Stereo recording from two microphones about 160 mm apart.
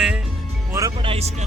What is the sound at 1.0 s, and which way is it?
Speech, 35° right (ahead or behind).